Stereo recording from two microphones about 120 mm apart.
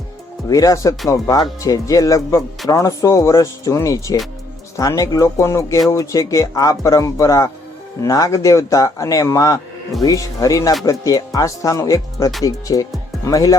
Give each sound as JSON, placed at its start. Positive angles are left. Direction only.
{"t": 0.4, "sound": "speech", "side_deg": 30}